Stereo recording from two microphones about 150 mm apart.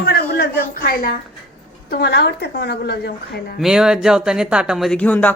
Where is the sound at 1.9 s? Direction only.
90° left.